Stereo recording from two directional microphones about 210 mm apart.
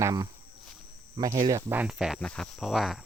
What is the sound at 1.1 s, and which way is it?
Speech, 20° right (ahead or behind).